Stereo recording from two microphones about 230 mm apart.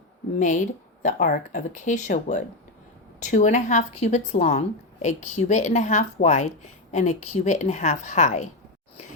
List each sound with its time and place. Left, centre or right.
0.3 s speech: left